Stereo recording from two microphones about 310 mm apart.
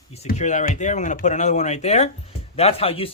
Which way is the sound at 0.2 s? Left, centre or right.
Left.